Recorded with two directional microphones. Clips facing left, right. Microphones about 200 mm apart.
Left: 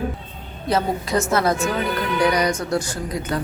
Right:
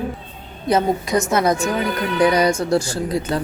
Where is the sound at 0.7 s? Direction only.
20° right (ahead or behind).